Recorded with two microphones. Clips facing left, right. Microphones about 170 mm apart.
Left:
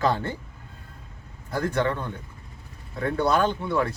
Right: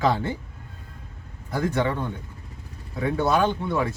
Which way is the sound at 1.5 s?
15° right (ahead or behind).